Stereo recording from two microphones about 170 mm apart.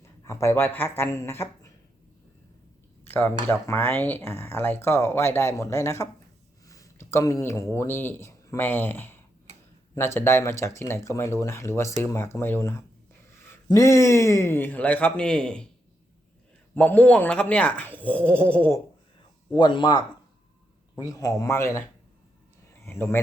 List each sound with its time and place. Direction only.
0.3 s speech: 15° left (ahead or behind)
3.1 s speech: 10° left (ahead or behind)
10.2 s speech: 15° left (ahead or behind)
16.7 s speech: 10° left (ahead or behind)
19.5 s a man's voice: 25° left (ahead or behind)
22.9 s speech: 15° left (ahead or behind)